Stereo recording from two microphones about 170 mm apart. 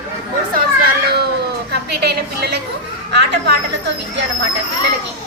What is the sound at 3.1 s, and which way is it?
Speech, 90° right.